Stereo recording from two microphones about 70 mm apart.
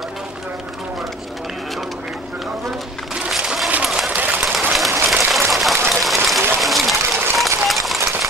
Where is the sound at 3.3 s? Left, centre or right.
Centre.